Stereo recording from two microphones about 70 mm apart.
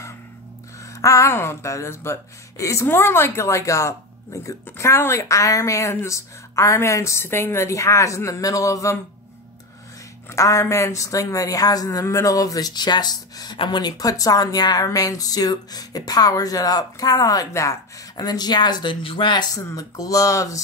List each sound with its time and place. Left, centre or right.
1.0 s speech: left
1.3 s speech: left
2.9 s a woman's voice: left
10.3 s speech: left
14.9 s speech: left
17.5 s a woman's voice: left
18.1 s speech: left
19.7 s a woman's voice: left